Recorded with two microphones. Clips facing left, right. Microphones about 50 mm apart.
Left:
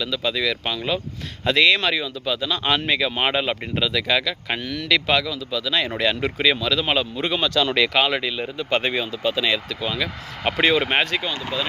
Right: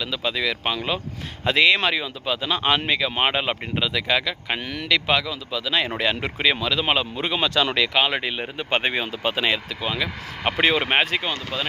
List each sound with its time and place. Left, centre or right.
0.0 s speech: centre
2.6 s speech: centre
4.6 s speech: right
4.9 s speech: centre
8.2 s speech: right
9.8 s speech: centre